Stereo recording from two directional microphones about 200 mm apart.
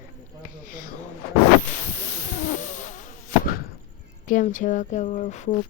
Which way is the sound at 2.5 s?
40° left (ahead or behind).